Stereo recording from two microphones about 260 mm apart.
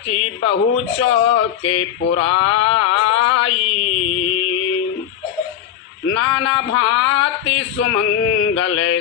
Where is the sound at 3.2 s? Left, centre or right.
Left.